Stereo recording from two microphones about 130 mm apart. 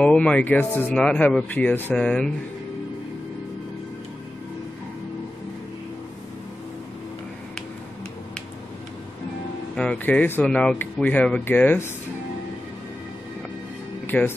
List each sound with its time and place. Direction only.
0.0 s speech: 10° left (ahead or behind)
9.8 s speech: 10° left (ahead or behind)
14.0 s speech: 15° left (ahead or behind)